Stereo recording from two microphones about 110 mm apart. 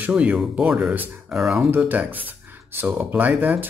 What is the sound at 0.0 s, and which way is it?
Speech, 10° right (ahead or behind).